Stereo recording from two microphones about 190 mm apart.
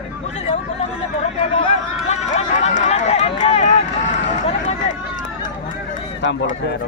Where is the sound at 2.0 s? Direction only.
35° left (ahead or behind).